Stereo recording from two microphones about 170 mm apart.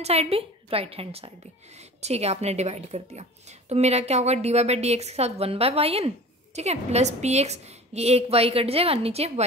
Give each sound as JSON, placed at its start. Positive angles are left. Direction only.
{"t": 0.0, "sound": "speech", "side_deg": -35}